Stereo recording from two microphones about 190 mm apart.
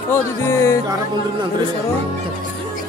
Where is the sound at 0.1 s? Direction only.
15° left (ahead or behind).